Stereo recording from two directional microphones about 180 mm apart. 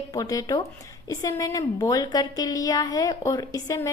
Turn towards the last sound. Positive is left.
turn(degrees=20)  # may be behind; listen again after turning